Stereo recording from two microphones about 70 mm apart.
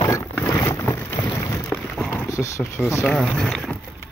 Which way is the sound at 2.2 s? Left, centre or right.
Left.